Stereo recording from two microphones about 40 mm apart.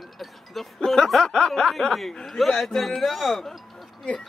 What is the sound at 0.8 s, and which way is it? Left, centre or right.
Snicker, centre.